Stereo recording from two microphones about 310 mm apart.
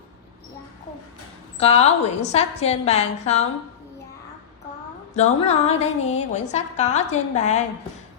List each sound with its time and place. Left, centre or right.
1.5 s a woman's voice: centre
5.1 s a woman's voice: left